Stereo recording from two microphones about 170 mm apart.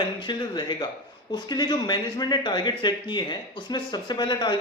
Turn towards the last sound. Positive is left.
turn(degrees=25)  # may be behind; listen again after turning